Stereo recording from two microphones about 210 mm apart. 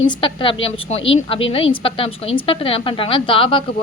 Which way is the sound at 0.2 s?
25° left (ahead or behind).